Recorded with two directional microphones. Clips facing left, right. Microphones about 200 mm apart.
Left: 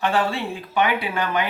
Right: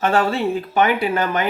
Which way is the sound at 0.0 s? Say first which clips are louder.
Right 4 dB; 45° right (ahead or behind).